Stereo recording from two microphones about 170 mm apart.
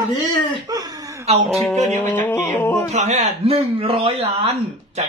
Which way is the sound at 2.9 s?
45° right (ahead or behind).